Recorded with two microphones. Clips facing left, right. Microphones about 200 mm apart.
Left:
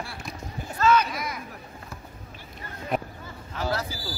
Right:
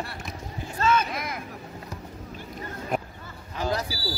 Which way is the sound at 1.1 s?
55° right (ahead or behind).